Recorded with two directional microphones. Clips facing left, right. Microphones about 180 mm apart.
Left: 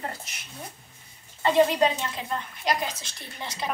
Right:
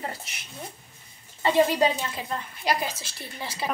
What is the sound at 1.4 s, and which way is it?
A woman's voice, 5° right (ahead or behind).